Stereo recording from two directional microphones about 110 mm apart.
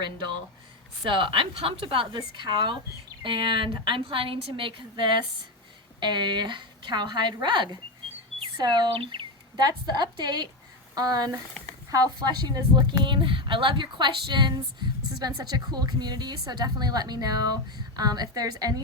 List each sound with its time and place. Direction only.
1.1 s a woman's voice: 50° right (ahead or behind)
11.6 s a sound: 10° left (ahead or behind)
11.9 s a woman's voice: 35° right (ahead or behind)